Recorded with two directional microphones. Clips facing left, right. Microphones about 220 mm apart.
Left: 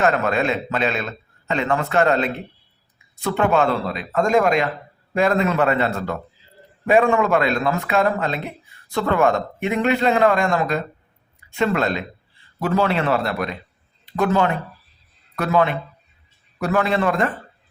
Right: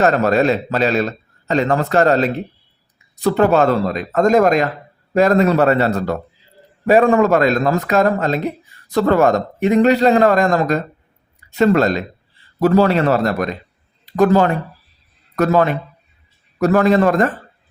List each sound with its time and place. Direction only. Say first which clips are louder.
0.0 s a man's voice: right 5 dB; 35° right (ahead or behind)